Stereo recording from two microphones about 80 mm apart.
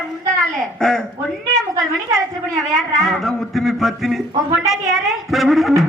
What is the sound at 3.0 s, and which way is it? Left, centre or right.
Speech, centre.